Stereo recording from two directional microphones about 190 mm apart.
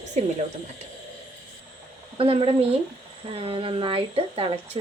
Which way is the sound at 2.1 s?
30° right (ahead or behind).